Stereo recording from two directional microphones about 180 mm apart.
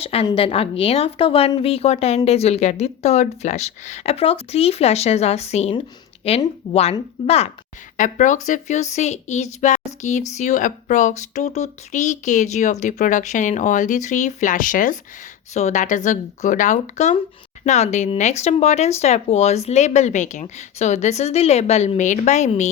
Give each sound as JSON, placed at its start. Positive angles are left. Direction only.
{"t": 0.0, "sound": "a woman's voice", "side_deg": 35}
{"t": 7.3, "sound": "a woman's voice", "side_deg": 35}